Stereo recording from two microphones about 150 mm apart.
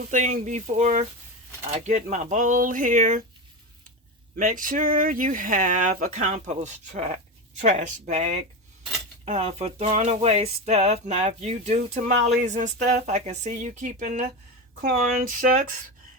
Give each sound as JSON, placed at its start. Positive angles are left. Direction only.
{"t": 0.1, "sound": "speech", "side_deg": -55}
{"t": 4.4, "sound": "speech", "side_deg": -60}